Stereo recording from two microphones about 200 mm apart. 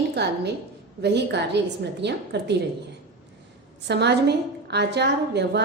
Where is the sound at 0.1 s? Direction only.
55° right (ahead or behind).